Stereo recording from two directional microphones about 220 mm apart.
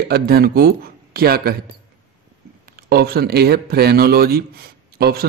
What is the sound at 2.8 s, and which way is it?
Speech, 45° right (ahead or behind).